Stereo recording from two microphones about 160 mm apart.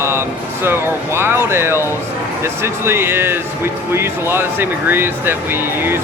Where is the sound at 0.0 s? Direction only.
15° right (ahead or behind).